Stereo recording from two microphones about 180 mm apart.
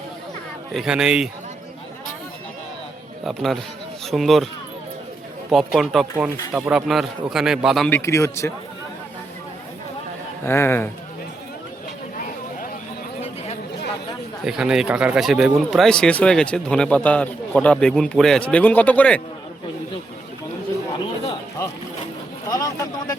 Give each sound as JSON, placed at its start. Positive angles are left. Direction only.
{"t": 0.7, "sound": "speech", "side_deg": 0}
{"t": 3.2, "sound": "speech", "side_deg": 0}
{"t": 5.5, "sound": "speech", "side_deg": 0}
{"t": 7.9, "sound": "a man's voice", "side_deg": 15}
{"t": 10.4, "sound": "a man's voice", "side_deg": 10}
{"t": 14.4, "sound": "speech", "side_deg": -5}
{"t": 22.4, "sound": "speech", "side_deg": 20}